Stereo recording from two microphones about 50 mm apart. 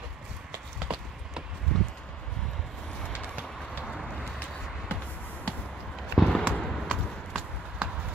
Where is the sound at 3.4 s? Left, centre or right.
Centre.